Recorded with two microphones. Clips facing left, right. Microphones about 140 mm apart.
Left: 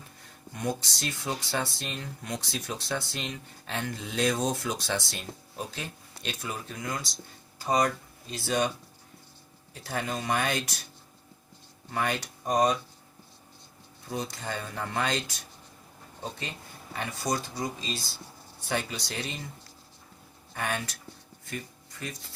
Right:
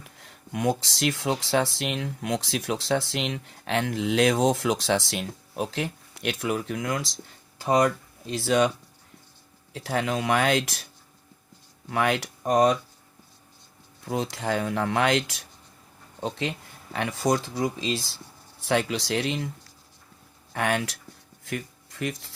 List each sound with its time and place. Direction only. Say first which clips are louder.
0.0 s speech: right 1 dB; 85° right
9.7 s speech: right 6 dB; 90° right
11.9 s speech: right 5 dB; 85° right
14.1 s speech: right 7 dB; 90° right
20.5 s speech: right 7 dB; 85° right
21.4 s a sound: right 6 dB; 90° right